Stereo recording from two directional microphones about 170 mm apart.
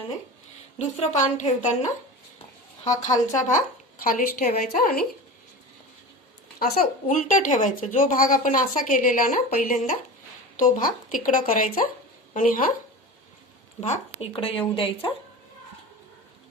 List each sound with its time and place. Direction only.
0.8 s speech: 40° left (ahead or behind)
2.9 s a woman's voice: 20° left (ahead or behind)
3.3 s a woman's voice: 45° left (ahead or behind)
6.6 s speech: 60° left (ahead or behind)
13.8 s speech: 45° left (ahead or behind)
14.3 s speech: 30° left (ahead or behind)